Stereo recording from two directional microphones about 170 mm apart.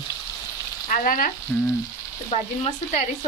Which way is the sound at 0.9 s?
50° left (ahead or behind).